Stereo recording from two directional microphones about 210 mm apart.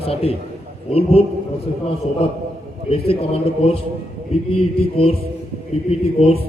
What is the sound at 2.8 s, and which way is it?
A man's voice, 30° left (ahead or behind).